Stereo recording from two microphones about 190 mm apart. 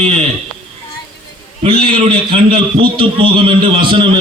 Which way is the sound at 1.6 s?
30° right (ahead or behind).